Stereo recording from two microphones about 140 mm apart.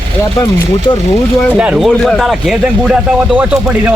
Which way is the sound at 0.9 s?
35° left (ahead or behind).